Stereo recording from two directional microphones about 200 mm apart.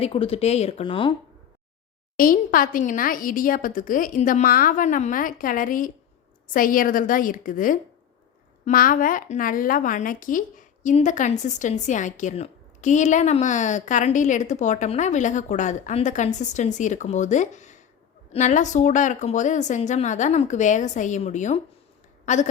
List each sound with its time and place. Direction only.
0.0 s speech: 30° left (ahead or behind)
2.1 s a woman's voice: 45° left (ahead or behind)